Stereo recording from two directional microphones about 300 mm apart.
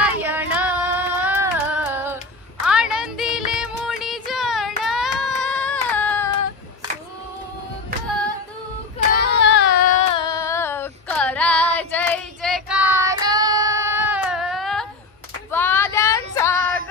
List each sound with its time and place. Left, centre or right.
0.0 s female singing: centre
2.6 s a sound: centre
9.1 s child singing: left
10.1 s female singing: centre